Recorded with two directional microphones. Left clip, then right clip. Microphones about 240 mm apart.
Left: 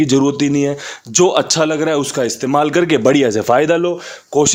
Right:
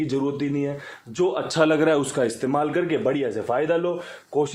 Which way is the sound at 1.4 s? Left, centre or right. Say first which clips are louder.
Left 4 dB; left.